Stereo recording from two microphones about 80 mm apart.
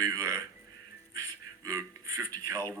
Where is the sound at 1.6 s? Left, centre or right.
Right.